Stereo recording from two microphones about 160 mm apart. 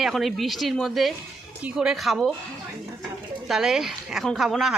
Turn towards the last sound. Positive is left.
turn(degrees=0)  # may be behind; listen again after turning